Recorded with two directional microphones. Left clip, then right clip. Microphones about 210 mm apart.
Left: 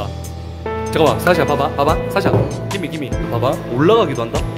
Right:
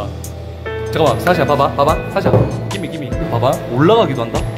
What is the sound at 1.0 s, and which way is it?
Speech, 15° left (ahead or behind).